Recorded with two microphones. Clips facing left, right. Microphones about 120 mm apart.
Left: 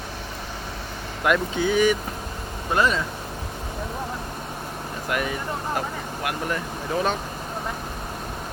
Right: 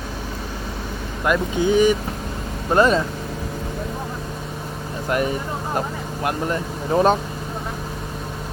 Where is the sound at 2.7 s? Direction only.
35° right (ahead or behind).